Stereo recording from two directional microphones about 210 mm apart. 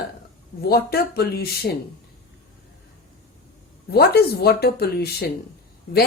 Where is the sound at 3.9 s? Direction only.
50° left (ahead or behind).